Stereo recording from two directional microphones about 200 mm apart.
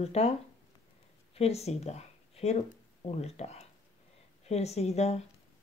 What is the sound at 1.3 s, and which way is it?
Speech, 30° left (ahead or behind).